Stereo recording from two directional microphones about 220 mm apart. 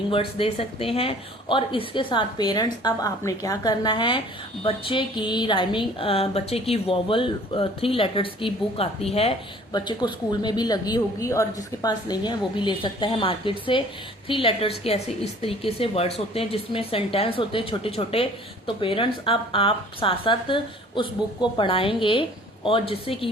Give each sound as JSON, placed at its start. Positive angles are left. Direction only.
{"t": 0.1, "sound": "a woman's voice", "side_deg": 25}